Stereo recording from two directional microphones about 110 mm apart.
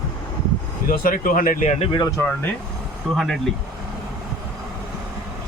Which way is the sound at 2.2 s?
15° left (ahead or behind).